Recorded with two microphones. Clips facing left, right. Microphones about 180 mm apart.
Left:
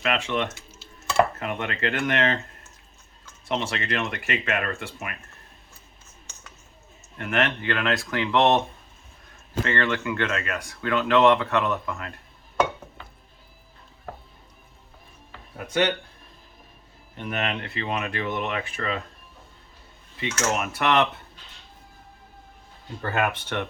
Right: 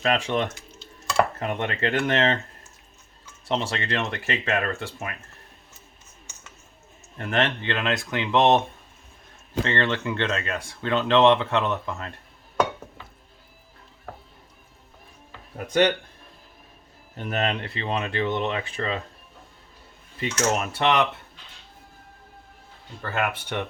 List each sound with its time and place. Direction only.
0.0 s speech: 35° right (ahead or behind)
0.5 s stir: centre (ahead or behind)
1.4 s speech: 35° right (ahead or behind)
3.5 s speech: 35° right (ahead or behind)
7.2 s speech: 35° right (ahead or behind); by 8.6 s 20° right (ahead or behind)
9.6 s speech: 25° right (ahead or behind)
15.5 s speech: 40° right (ahead or behind)
17.2 s speech: 40° right (ahead or behind)
20.2 s speech: 35° right (ahead or behind)
23.5 s speech: 15° right (ahead or behind)